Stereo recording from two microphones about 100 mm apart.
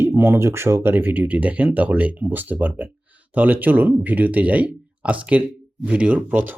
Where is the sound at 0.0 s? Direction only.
25° right (ahead or behind).